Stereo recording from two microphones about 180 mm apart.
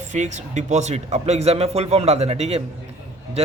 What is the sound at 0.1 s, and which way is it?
Speech, 40° right (ahead or behind).